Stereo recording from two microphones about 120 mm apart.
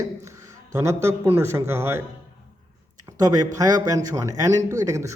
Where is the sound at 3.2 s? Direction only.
30° right (ahead or behind).